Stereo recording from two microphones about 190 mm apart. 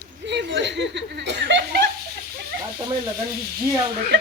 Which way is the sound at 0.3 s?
65° right (ahead or behind).